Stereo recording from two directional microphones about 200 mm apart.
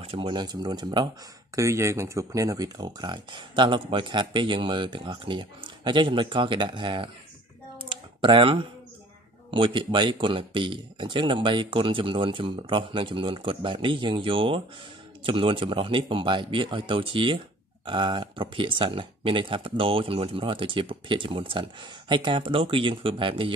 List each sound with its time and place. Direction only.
0.0 s speech: 25° right (ahead or behind)
7.8 s a sound: 25° right (ahead or behind)
9.5 s speech: 25° right (ahead or behind)